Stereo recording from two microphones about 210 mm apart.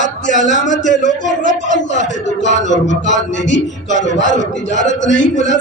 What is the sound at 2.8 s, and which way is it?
Speech, 60° left (ahead or behind).